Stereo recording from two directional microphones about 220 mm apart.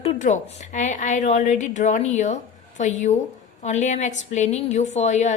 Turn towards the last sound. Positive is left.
turn(degrees=30)  # may be behind; listen again after turning